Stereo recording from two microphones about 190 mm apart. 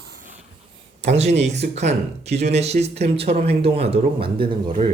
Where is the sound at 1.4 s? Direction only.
35° right (ahead or behind).